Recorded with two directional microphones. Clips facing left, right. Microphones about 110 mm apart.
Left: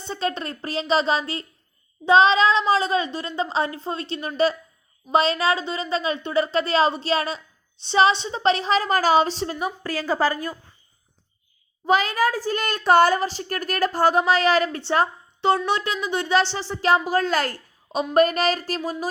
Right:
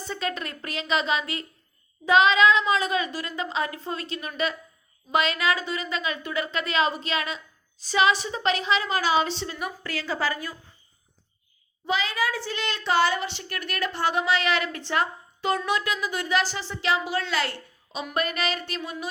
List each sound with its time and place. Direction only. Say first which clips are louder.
0.0 s a woman's voice: left 4 dB; 30° left (ahead or behind)
11.9 s a woman's voice: left 6 dB; 45° left (ahead or behind)